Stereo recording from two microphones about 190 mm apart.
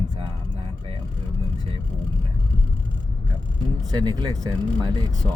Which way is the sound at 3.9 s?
20° right (ahead or behind).